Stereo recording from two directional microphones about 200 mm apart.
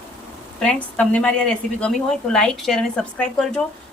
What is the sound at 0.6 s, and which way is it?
A woman's voice, 5° left (ahead or behind).